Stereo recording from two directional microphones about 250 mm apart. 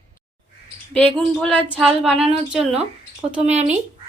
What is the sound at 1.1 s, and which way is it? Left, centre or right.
Speech, centre.